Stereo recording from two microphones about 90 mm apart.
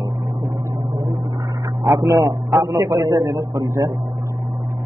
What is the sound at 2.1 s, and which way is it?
A man's voice, 40° right (ahead or behind).